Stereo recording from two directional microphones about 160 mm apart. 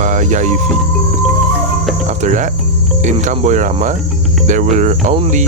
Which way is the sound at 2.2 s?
50° right (ahead or behind).